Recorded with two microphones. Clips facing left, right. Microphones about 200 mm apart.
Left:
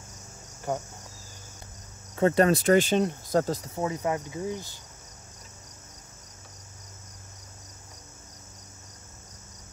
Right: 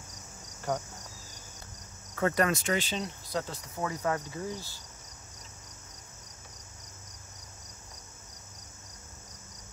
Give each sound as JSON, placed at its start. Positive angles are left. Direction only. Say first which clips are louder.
{"t": 0.7, "sound": "cricket", "louder": "left 2 dB", "side_deg": 10}
{"t": 2.1, "sound": "speech", "louder": "left 6 dB", "side_deg": 25}
{"t": 2.7, "sound": "speech", "louder": "left 10 dB", "side_deg": 50}
{"t": 3.7, "sound": "speech", "louder": "left 1 dB", "side_deg": 25}
{"t": 4.3, "sound": "cricket", "louder": "left 4 dB", "side_deg": 15}